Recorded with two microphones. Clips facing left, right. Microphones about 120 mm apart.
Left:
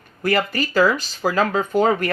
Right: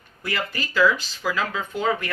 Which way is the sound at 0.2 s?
50° left (ahead or behind).